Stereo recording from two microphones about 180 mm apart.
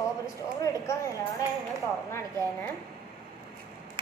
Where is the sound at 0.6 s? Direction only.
15° left (ahead or behind).